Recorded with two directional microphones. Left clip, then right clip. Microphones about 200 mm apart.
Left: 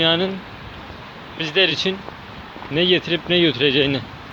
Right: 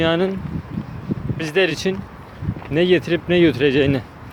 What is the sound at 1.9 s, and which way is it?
Speech, 40° right (ahead or behind).